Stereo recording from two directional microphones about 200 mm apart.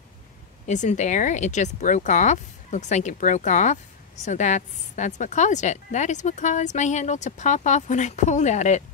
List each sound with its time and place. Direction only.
0.7 s speech: 35° left (ahead or behind)